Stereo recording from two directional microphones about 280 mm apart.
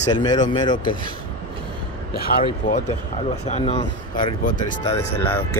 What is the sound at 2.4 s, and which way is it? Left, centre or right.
Speech, left.